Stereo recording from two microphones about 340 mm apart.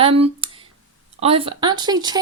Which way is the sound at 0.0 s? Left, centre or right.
Centre.